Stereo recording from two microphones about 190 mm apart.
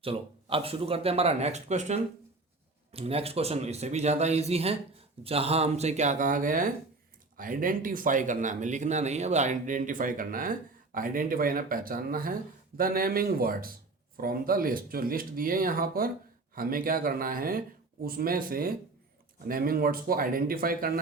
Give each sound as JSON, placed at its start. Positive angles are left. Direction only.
{"t": 0.0, "sound": "a man's voice", "side_deg": -30}